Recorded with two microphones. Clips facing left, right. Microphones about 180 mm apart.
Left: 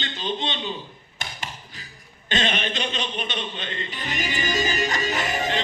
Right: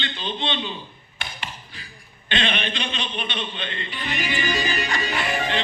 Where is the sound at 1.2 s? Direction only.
40° left (ahead or behind).